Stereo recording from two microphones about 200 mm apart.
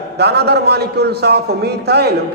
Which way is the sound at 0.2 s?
55° right (ahead or behind).